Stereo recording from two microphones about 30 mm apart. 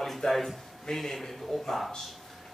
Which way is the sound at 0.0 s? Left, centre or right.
Centre.